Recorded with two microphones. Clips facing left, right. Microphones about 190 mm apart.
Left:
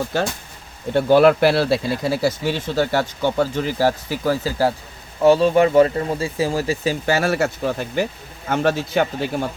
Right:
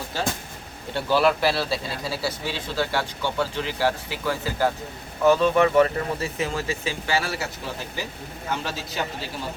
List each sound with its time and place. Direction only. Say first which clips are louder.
0.9 s a man's voice: left 8 dB; 55° left (ahead or behind)